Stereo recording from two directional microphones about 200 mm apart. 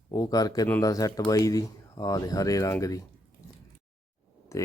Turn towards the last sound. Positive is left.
turn(degrees=15)  # may be behind; listen again after turning